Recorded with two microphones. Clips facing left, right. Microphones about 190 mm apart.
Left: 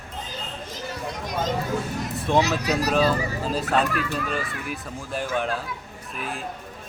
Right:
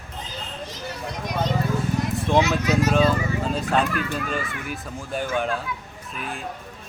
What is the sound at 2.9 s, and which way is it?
Speech, 5° left (ahead or behind).